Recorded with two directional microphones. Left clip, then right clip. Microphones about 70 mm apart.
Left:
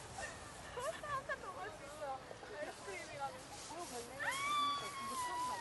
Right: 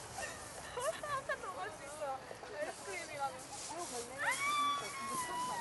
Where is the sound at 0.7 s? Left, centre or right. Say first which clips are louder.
Right 3 dB; right.